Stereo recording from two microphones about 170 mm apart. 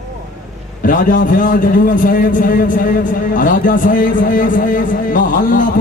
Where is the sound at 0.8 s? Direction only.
50° left (ahead or behind).